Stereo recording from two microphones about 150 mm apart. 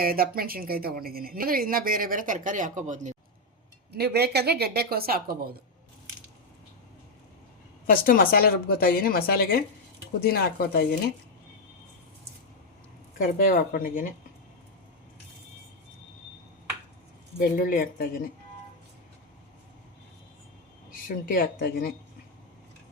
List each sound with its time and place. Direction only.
0.0 s speech: 80° right; by 3.2 s 55° right (ahead or behind)
3.9 s speech: 90° right
7.9 s a woman's voice: 70° left (ahead or behind); by 10.8 s 90° left
13.1 s speech: 70° left (ahead or behind)
17.6 s speech: 70° left (ahead or behind)
21.2 s a woman's voice: 80° left